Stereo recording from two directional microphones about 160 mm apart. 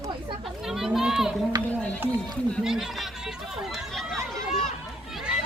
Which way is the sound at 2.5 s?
5° right (ahead or behind).